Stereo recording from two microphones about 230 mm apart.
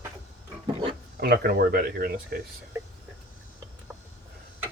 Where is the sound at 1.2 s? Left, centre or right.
Right.